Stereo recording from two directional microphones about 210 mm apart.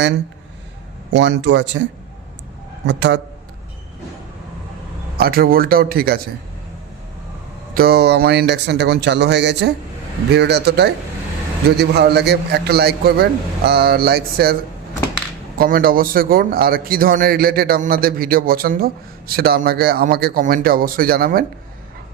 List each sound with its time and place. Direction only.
1.1 s speech: 60° right (ahead or behind)
5.1 s a man's voice: 45° right (ahead or behind)
7.7 s a man's voice: 45° right (ahead or behind)